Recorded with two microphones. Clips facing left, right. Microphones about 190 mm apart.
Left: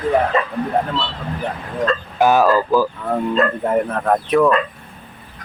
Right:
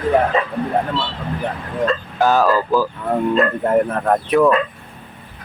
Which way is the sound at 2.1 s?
15° left (ahead or behind).